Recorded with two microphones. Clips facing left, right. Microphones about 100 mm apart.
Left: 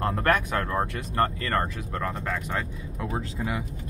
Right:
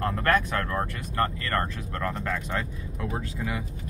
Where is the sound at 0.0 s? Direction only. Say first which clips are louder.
Even; 20° left (ahead or behind).